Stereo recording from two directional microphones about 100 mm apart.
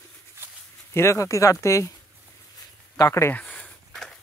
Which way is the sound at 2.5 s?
35° left (ahead or behind).